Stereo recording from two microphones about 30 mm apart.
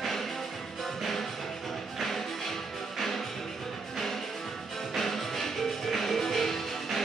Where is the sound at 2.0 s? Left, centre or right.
Centre.